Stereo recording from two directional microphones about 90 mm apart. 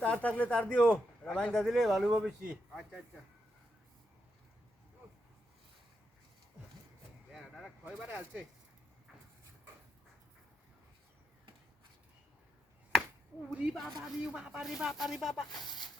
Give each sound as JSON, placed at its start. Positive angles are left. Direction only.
{"t": 0.0, "sound": "a man's voice", "side_deg": 15}
{"t": 7.3, "sound": "a sound", "side_deg": -5}
{"t": 13.5, "sound": "a woman's voice", "side_deg": -15}